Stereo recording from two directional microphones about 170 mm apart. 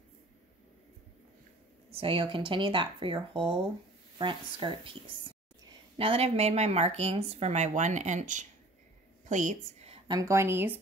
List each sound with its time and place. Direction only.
1.9 s speech: 35° right (ahead or behind)
5.9 s a woman's voice: 35° right (ahead or behind)
10.0 s a woman's voice: 20° right (ahead or behind)